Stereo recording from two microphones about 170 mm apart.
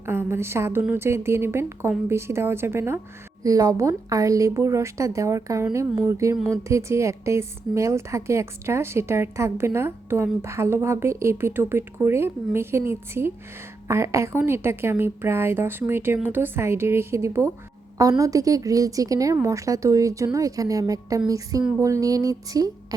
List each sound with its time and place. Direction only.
0.0 s a woman's voice: 15° right (ahead or behind)